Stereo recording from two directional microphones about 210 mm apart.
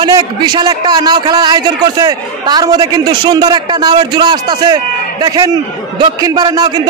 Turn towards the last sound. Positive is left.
turn(degrees=-20)  # may be behind; listen again after turning